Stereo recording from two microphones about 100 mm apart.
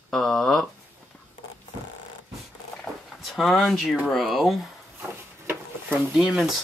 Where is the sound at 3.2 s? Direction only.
Centre (ahead or behind).